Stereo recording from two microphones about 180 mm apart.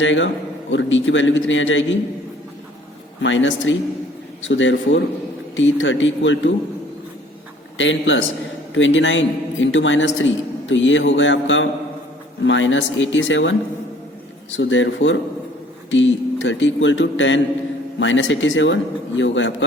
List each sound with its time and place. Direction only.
0.0 s a man's voice: 90° left
3.2 s a man's voice: 90° left
7.8 s a man's voice: 90° left